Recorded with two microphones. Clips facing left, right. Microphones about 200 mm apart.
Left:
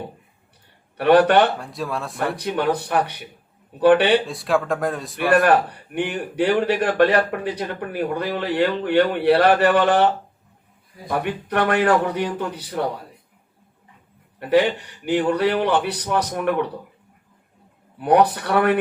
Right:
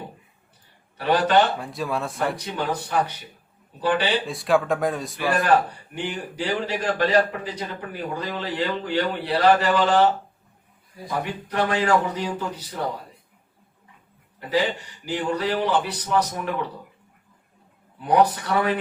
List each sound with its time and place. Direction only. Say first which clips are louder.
0.9 s a man's voice: left 5 dB; 60° left (ahead or behind)
1.5 s speech: even; centre (ahead or behind)
2.3 s a man's voice: left 6 dB; 60° left (ahead or behind)
4.3 s speech: even; centre (ahead or behind)
5.5 s a man's voice: left 2 dB; 60° left (ahead or behind)
14.3 s a man's voice: left 6 dB; 60° left (ahead or behind)
18.0 s a man's voice: left 3 dB; 65° left (ahead or behind)